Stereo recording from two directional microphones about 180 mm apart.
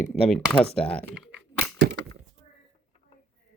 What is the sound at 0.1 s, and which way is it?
Speech, 5° left (ahead or behind).